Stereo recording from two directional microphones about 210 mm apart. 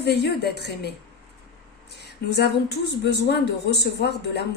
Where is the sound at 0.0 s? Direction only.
50° left (ahead or behind).